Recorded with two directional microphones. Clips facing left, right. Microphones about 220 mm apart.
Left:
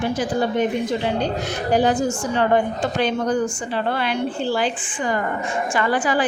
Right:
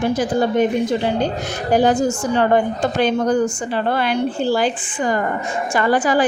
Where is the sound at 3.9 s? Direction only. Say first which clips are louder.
Right 4 dB; 45° right (ahead or behind).